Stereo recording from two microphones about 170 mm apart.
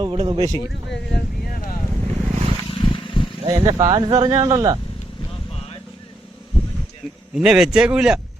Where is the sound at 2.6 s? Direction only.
30° left (ahead or behind).